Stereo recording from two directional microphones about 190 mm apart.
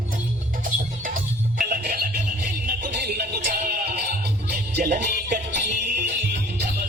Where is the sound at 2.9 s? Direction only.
60° right (ahead or behind).